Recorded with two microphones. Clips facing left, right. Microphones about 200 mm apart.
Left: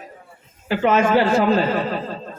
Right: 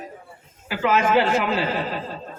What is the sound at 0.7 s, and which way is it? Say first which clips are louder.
Speech: left 3 dB; 30° left (ahead or behind).